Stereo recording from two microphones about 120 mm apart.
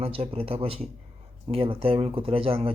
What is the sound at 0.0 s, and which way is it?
Speech, 50° right (ahead or behind).